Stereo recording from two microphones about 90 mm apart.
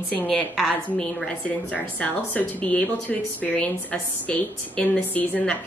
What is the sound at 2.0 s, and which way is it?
Speech, 15° left (ahead or behind).